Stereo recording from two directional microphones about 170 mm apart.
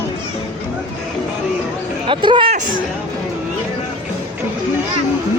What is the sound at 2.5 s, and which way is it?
Speech, 50° right (ahead or behind).